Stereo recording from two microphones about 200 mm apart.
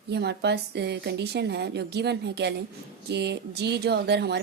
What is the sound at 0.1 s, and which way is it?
A woman's voice, 55° right (ahead or behind).